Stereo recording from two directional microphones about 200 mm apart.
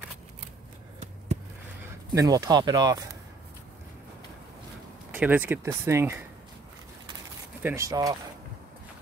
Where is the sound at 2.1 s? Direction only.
15° right (ahead or behind).